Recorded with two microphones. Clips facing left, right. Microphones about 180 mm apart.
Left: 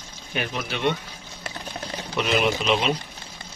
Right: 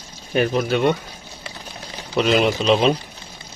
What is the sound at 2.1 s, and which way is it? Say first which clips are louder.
Speech: right 5 dB; 35° right (ahead or behind).